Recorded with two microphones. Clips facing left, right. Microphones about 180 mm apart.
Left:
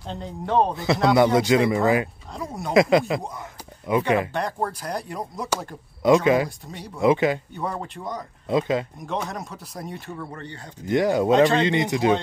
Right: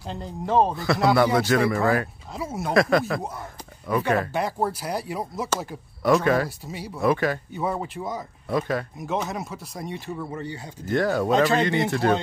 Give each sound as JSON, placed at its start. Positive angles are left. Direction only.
{"t": 0.0, "sound": "speech", "side_deg": 0}
{"t": 1.1, "sound": "a man's voice", "side_deg": 20}
{"t": 2.3, "sound": "speech", "side_deg": -5}
{"t": 2.7, "sound": "a man's voice", "side_deg": 20}
{"t": 4.3, "sound": "speech", "side_deg": -5}
{"t": 6.0, "sound": "speech", "side_deg": 15}
{"t": 6.6, "sound": "speech", "side_deg": -5}
{"t": 7.0, "sound": "a man's voice", "side_deg": 20}
{"t": 7.5, "sound": "speech", "side_deg": -5}
{"t": 8.5, "sound": "a man's voice", "side_deg": 20}
{"t": 9.0, "sound": "speech", "side_deg": -5}
{"t": 10.9, "sound": "speech", "side_deg": 15}
{"t": 11.3, "sound": "speech", "side_deg": -5}
{"t": 11.6, "sound": "speech", "side_deg": 15}